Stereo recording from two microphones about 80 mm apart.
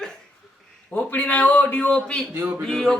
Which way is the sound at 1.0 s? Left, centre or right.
Left.